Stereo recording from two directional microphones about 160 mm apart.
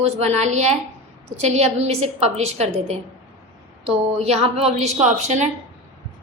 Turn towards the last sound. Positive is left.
turn(degrees=-45)  # may be behind; listen again after turning